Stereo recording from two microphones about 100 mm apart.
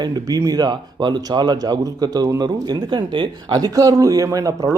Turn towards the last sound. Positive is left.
turn(degrees=-35)  # may be behind; listen again after turning